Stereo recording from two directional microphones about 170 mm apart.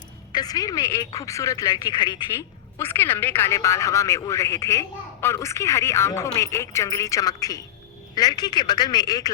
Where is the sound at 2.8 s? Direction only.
10° left (ahead or behind).